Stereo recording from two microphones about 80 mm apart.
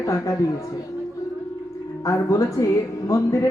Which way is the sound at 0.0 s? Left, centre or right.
Left.